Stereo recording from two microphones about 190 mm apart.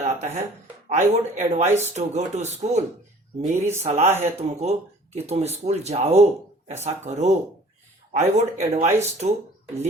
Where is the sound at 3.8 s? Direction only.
35° right (ahead or behind).